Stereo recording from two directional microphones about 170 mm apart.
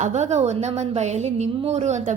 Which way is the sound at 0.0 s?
45° right (ahead or behind).